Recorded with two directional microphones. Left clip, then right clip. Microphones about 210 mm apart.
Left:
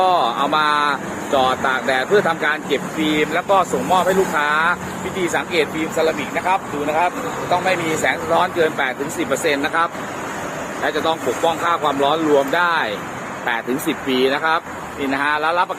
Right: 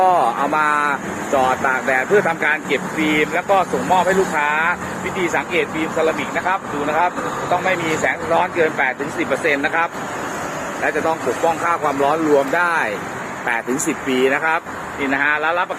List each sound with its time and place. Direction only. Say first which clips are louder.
0.1 s speech: right 1 dB; 5° right (ahead or behind)
2.1 s speech: even; 15° left (ahead or behind)
10.8 s speech: even; centre (ahead or behind)
15.0 s speech: right 1 dB; 15° left (ahead or behind)